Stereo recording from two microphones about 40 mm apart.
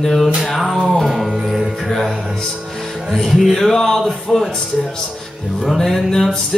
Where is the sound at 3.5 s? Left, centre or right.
Centre.